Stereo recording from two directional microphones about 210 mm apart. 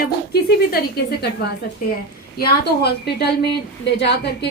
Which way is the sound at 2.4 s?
50° left (ahead or behind).